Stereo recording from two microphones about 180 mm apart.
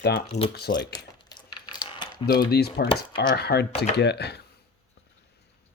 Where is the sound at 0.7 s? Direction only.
50° left (ahead or behind).